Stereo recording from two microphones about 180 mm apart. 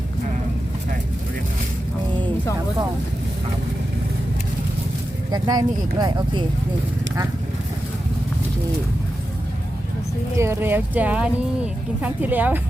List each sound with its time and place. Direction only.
5.3 s speech: 20° right (ahead or behind)
10.3 s speech: 15° right (ahead or behind)